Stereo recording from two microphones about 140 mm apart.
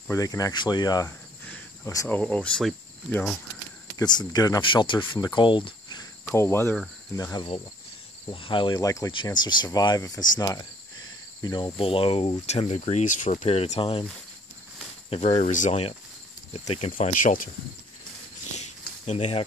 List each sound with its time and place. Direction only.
0.1 s speech: 25° left (ahead or behind)
2.0 s speech: 10° left (ahead or behind)
4.0 s speech: 30° left (ahead or behind)
6.3 s speech: 20° left (ahead or behind)
8.3 s speech: 35° left (ahead or behind)
15.0 s speech: 45° left (ahead or behind)
15.5 s speech: 65° left (ahead or behind)
16.5 s speech: 45° left (ahead or behind)
17.0 s speech: 70° left (ahead or behind)
19.0 s speech: 50° left (ahead or behind)